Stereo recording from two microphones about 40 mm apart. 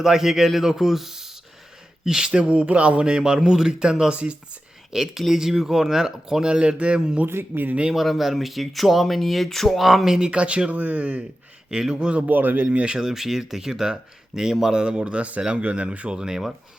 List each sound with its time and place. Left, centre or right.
0.0 s speech: centre
2.0 s a man's voice: centre
4.1 s speech: right
4.9 s speech: centre
7.3 s speech: right
7.9 s speech: centre
10.2 s speech: right
11.7 s a man's voice: centre
12.3 s speech: right
12.6 s speech: right
13.0 s a man's voice: centre